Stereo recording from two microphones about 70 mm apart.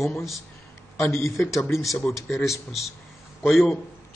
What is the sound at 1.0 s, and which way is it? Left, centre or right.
Speech, left.